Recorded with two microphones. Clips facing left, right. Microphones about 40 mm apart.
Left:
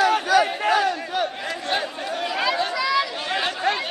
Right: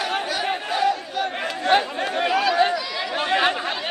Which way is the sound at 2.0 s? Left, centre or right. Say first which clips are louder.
Right 5 dB; right.